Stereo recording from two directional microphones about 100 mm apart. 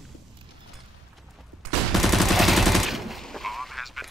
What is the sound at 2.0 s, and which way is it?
Machine gun, centre (ahead or behind).